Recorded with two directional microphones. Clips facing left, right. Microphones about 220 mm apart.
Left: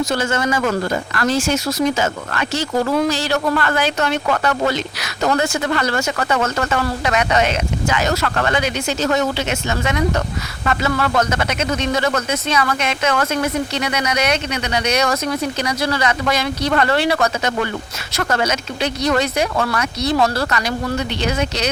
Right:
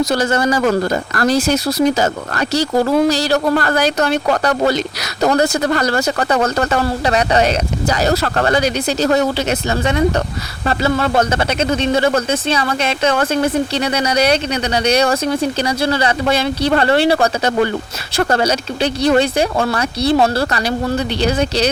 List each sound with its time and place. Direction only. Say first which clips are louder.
0.0 s speech: right 4 dB; 35° right (ahead or behind)